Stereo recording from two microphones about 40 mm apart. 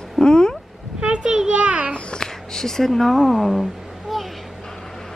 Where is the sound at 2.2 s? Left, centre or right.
Centre.